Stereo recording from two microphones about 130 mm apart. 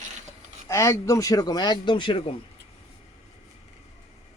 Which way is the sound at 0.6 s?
25° left (ahead or behind).